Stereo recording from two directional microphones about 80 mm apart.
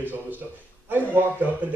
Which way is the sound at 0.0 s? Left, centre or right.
Right.